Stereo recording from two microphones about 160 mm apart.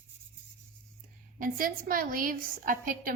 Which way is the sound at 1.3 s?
60° right (ahead or behind).